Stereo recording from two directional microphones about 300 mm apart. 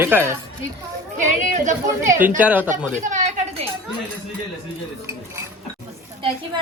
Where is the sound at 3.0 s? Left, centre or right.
Right.